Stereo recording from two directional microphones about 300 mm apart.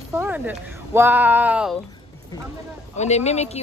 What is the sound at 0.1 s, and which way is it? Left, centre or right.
Speech, centre.